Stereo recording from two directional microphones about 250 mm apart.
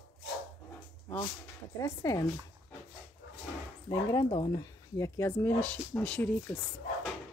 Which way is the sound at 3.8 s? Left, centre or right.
Centre.